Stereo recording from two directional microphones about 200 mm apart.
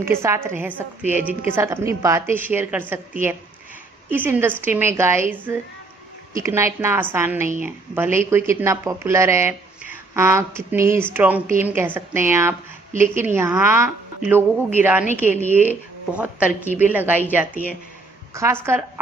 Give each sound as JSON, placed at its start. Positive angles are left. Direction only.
{"t": 0.0, "sound": "speech", "side_deg": -15}
{"t": 4.1, "sound": "speech", "side_deg": -10}